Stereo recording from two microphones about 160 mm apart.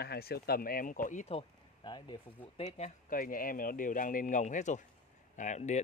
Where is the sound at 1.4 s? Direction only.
30° left (ahead or behind).